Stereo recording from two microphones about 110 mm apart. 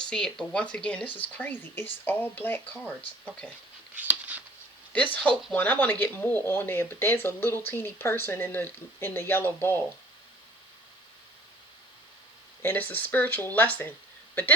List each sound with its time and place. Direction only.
0.0 s speech: 5° left (ahead or behind)
3.9 s a sound: 15° right (ahead or behind)
4.9 s speech: 15° left (ahead or behind)
12.6 s speech: 15° left (ahead or behind)